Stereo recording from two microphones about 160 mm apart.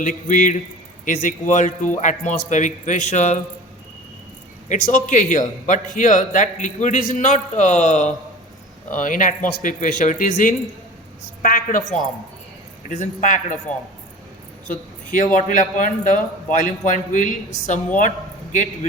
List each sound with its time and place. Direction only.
0.0 s a man's voice: 55° left (ahead or behind)
4.9 s a man's voice: 50° left (ahead or behind)
14.7 s a man's voice: 55° left (ahead or behind)